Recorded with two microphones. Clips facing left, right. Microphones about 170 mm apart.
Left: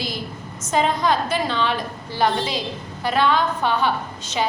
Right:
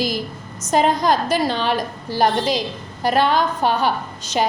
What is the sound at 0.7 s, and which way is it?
A woman's voice, 40° right (ahead or behind).